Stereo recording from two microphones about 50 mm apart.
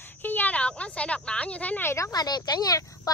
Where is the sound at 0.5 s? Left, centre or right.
Left.